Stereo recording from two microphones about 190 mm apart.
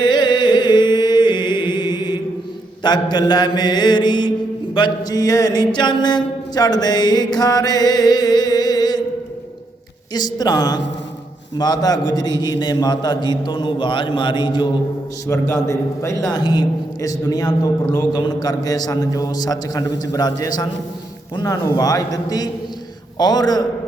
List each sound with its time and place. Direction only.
0.0 s chant: 25° left (ahead or behind)
2.8 s mantra: 20° left (ahead or behind)
10.2 s mantra: 20° left (ahead or behind)